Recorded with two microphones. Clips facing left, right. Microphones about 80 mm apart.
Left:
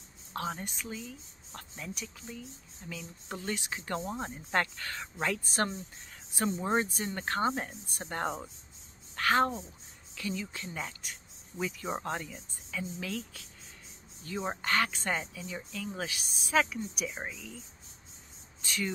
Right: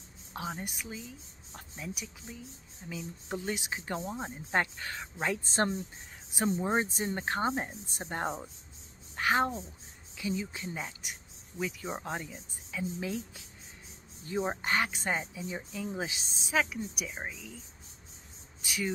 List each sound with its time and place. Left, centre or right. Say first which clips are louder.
0.3 s a woman's voice: left 2 dB; centre
9.1 s a sound: left 1 dB; centre
10.1 s a woman's voice: right 2 dB; centre
11.6 s speech: left 1 dB; centre
12.3 s a woman's voice: left 1 dB; centre
16.5 s speech: left 2 dB; centre
18.6 s speech: right 1 dB; centre